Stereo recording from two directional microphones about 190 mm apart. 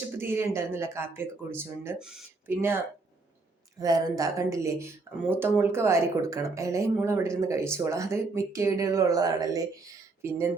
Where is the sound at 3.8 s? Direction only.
20° right (ahead or behind).